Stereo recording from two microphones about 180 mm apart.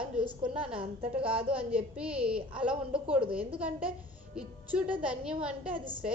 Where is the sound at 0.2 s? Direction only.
30° right (ahead or behind).